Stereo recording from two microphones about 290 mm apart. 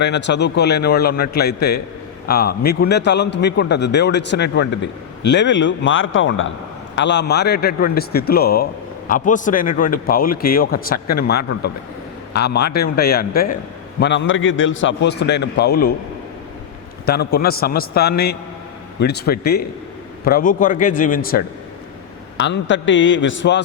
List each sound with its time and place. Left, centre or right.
0.0 s a man's voice: left
17.1 s a man's voice: left